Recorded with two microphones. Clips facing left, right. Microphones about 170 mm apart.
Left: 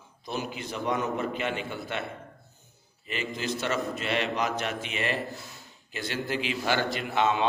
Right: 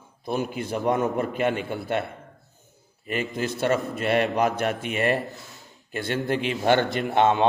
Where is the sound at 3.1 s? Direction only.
50° right (ahead or behind).